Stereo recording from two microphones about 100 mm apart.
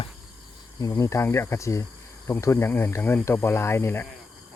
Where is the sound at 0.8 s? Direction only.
35° left (ahead or behind).